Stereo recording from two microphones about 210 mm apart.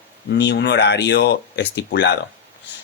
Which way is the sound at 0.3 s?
55° left (ahead or behind).